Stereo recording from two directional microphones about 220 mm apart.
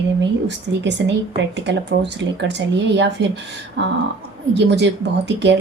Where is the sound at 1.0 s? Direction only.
55° right (ahead or behind).